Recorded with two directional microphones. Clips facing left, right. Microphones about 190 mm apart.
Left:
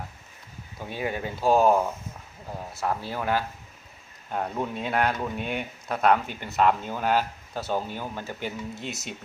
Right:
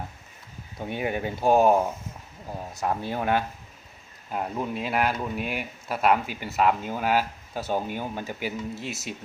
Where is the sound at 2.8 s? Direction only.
20° right (ahead or behind).